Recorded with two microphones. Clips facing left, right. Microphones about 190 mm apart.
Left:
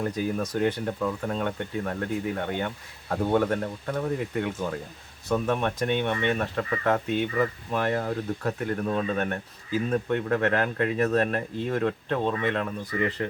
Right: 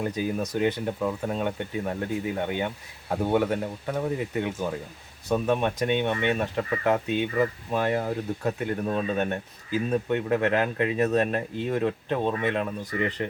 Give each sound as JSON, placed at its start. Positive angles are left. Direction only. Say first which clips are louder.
{"t": 0.0, "sound": "speech", "louder": "even", "side_deg": -15}